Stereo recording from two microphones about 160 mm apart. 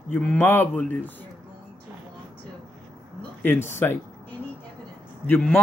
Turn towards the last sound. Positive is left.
turn(degrees=10)  # may be behind; listen again after turning